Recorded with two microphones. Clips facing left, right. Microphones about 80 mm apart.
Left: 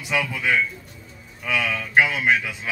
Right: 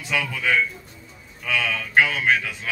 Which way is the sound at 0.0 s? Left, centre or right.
Centre.